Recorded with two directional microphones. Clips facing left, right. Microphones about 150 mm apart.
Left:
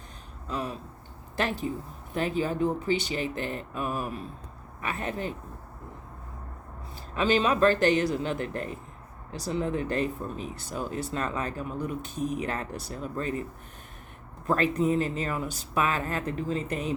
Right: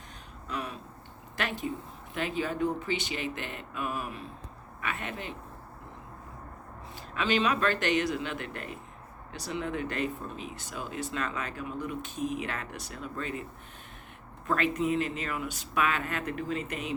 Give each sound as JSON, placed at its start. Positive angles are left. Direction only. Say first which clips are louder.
{"t": 0.4, "sound": "a sound", "louder": "left 4 dB", "side_deg": 35}
{"t": 1.4, "sound": "speech", "louder": "left 4 dB", "side_deg": 35}
{"t": 7.1, "sound": "speech", "louder": "left 3 dB", "side_deg": 35}
{"t": 14.4, "sound": "speech", "louder": "left 3 dB", "side_deg": 35}